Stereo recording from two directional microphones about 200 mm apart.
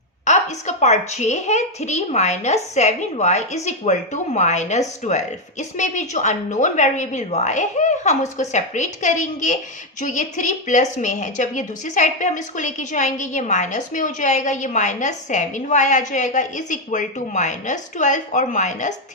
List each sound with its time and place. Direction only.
0.3 s a woman's voice: 35° left (ahead or behind)